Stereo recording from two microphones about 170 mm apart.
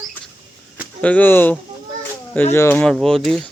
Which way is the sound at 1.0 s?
10° left (ahead or behind).